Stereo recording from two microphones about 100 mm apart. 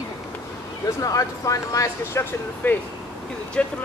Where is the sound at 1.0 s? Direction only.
35° left (ahead or behind).